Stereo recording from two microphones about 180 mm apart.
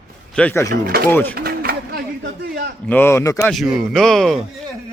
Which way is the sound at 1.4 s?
55° right (ahead or behind).